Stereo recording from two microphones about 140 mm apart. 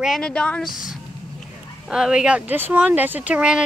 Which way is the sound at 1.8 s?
5° right (ahead or behind).